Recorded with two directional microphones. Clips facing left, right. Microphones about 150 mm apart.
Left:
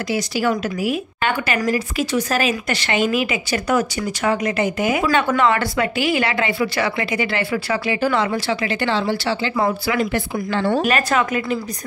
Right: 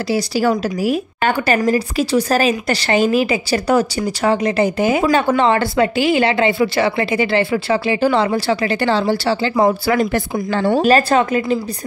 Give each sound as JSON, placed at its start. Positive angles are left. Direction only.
{"t": 0.1, "sound": "speech", "side_deg": -40}